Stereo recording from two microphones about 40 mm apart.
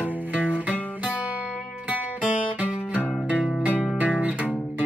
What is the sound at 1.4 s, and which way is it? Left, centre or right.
Music, right.